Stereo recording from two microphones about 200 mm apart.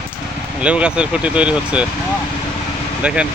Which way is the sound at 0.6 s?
5° right (ahead or behind).